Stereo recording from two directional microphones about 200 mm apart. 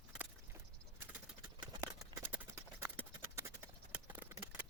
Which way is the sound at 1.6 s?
15° right (ahead or behind).